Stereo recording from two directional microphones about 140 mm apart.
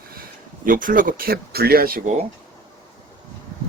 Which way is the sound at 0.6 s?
75° right (ahead or behind).